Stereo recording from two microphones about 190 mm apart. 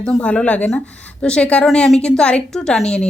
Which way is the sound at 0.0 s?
5° left (ahead or behind).